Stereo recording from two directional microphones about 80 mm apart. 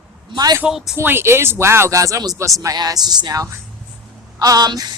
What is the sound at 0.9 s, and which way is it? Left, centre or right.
Speech, right.